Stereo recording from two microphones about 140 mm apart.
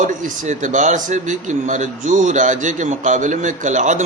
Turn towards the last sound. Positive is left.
turn(degrees=-60)  # may be behind; listen again after turning